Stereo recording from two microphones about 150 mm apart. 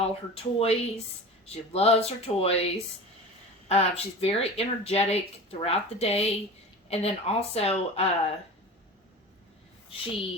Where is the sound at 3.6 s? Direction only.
45° left (ahead or behind).